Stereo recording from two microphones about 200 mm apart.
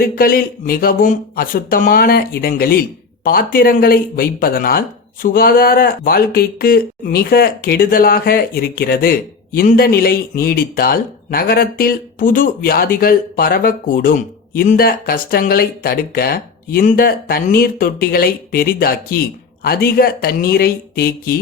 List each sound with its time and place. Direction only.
0.0 s speech: 45° left (ahead or behind)